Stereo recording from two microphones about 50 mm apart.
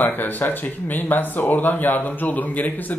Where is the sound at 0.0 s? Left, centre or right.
Left.